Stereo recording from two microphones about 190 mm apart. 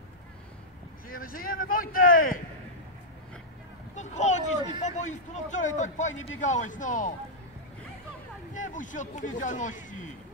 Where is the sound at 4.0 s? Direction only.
40° left (ahead or behind).